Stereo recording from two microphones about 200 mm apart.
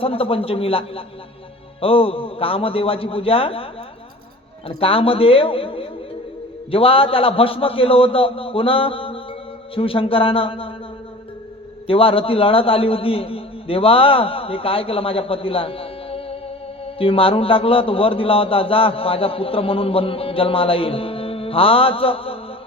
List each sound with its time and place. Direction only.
0.0 s a man's voice: 30° left (ahead or behind)
4.8 s a man's voice: 25° left (ahead or behind)
11.9 s a man's voice: 25° left (ahead or behind)